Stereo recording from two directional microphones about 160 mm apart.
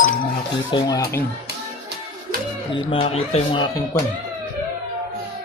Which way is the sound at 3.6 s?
20° left (ahead or behind).